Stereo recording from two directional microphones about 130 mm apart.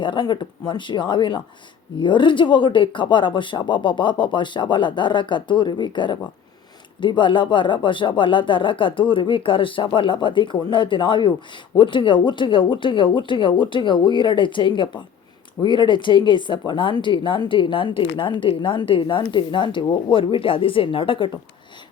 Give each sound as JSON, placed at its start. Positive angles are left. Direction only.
{"t": 0.0, "sound": "speech", "side_deg": 40}